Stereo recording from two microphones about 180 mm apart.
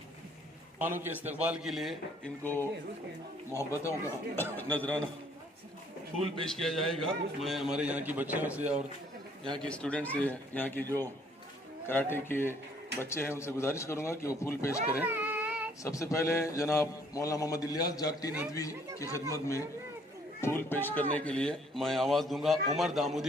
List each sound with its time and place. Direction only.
0.8 s a man's voice: 10° right (ahead or behind)
2.4 s a man's voice: 10° left (ahead or behind)
6.5 s a man's voice: centre (ahead or behind)
9.6 s a man's voice: 5° left (ahead or behind)
14.9 s a sound: 10° right (ahead or behind)
15.8 s a man's voice: 15° left (ahead or behind); by 23.2 s centre (ahead or behind)